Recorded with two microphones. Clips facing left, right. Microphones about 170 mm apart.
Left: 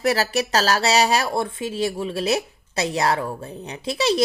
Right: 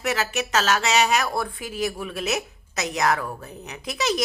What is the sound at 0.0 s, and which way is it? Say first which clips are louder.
Speech: left 5 dB; 35° left (ahead or behind).